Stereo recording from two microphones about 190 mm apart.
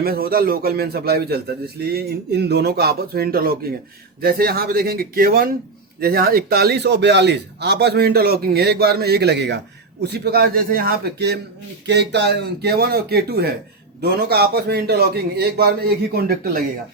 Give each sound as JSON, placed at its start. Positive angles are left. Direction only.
{"t": 0.0, "sound": "a man's voice", "side_deg": -55}